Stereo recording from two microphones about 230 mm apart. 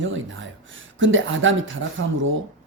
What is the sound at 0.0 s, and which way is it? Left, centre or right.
A woman's voice, right.